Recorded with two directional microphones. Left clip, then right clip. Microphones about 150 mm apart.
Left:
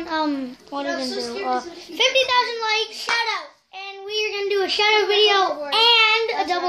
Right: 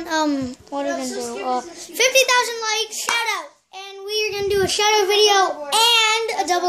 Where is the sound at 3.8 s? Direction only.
20° right (ahead or behind).